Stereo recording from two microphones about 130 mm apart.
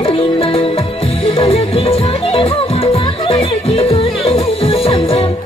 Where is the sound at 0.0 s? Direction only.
45° left (ahead or behind).